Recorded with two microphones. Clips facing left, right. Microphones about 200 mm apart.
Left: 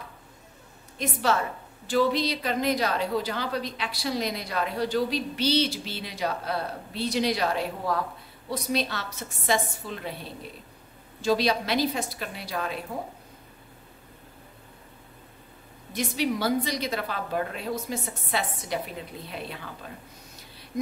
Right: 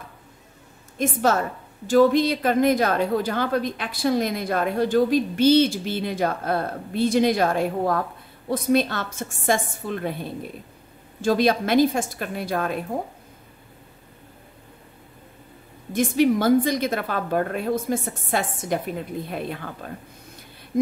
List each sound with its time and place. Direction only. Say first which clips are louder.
0.9 s a woman's voice: right 5 dB; 45° right (ahead or behind)
15.9 s a woman's voice: right 8 dB; 50° right (ahead or behind)